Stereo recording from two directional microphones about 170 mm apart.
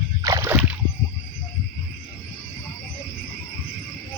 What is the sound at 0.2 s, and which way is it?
Rowboat, 20° right (ahead or behind).